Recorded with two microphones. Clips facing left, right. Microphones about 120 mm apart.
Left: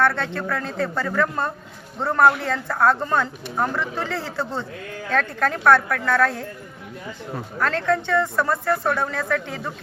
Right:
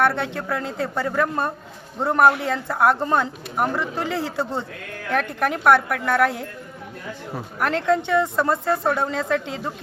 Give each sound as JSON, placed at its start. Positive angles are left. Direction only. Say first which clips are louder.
{"t": 0.0, "sound": "a woman's voice", "louder": "even", "side_deg": -15}
{"t": 7.6, "sound": "a woman's voice", "louder": "right 1 dB", "side_deg": -15}